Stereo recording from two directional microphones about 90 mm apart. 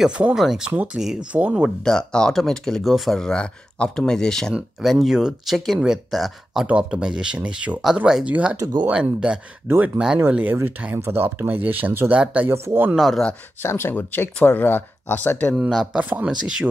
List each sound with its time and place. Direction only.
0.2 s speech: 5° right (ahead or behind)
1.9 s speech: 5° left (ahead or behind); by 12.4 s 15° right (ahead or behind)
12.4 s speech: 25° right (ahead or behind)
12.9 s speech: centre (ahead or behind)
13.6 s speech: 25° left (ahead or behind)
15.6 s speech: 5° right (ahead or behind)
16.0 s speech: 20° right (ahead or behind)